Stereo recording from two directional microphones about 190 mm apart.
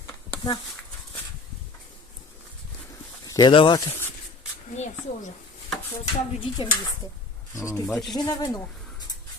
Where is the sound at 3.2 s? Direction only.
20° left (ahead or behind).